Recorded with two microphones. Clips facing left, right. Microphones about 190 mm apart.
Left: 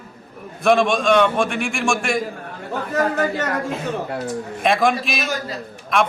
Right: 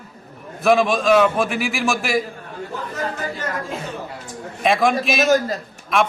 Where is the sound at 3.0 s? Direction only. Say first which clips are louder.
Left 8 dB; 70° left (ahead or behind).